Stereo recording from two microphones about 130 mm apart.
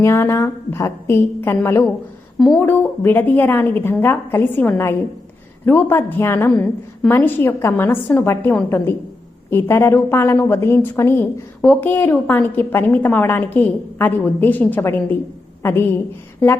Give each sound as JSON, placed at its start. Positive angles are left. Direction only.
{"t": 0.0, "sound": "a woman's voice", "side_deg": 20}
{"t": 6.5, "sound": "a woman's voice", "side_deg": 5}